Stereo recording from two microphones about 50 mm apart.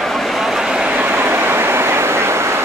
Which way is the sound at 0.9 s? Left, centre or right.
Right.